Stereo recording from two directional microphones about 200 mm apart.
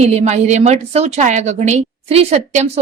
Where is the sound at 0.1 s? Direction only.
35° right (ahead or behind).